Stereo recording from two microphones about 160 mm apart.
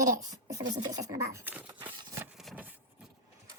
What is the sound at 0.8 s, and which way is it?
Speech, 20° right (ahead or behind).